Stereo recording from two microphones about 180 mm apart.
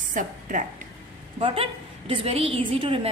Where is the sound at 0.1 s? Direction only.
45° right (ahead or behind).